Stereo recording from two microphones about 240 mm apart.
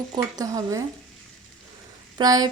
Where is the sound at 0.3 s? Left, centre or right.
Centre.